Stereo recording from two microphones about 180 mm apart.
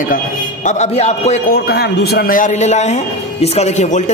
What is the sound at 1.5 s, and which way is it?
A man's voice, 60° left (ahead or behind).